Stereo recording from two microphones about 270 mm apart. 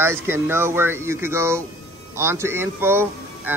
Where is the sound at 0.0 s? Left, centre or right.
Centre.